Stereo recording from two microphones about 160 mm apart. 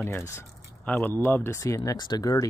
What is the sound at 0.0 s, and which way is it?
Speech, 15° left (ahead or behind).